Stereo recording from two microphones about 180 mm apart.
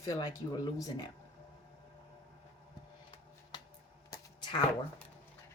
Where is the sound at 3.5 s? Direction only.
25° left (ahead or behind).